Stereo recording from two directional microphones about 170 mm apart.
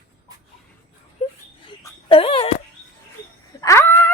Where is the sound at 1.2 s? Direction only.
45° left (ahead or behind).